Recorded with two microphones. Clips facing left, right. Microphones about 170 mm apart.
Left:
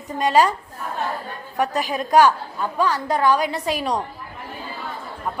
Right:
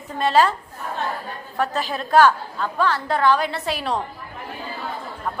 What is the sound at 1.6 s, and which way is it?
A woman's voice, 15° left (ahead or behind).